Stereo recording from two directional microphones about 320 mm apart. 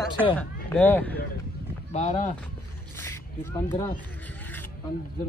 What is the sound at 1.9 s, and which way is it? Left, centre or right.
Speech, left.